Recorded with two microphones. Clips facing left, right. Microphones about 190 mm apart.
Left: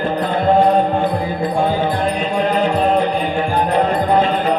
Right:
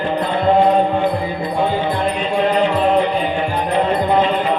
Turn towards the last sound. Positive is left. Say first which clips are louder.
# left 1 dB
turn(degrees=45)  # may be behind; listen again after turning